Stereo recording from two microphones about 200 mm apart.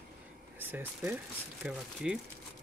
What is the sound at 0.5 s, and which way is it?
Speech, 10° right (ahead or behind).